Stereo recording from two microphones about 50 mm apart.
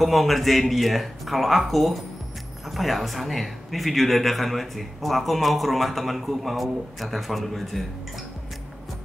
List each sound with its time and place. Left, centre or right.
0.0 s speech: centre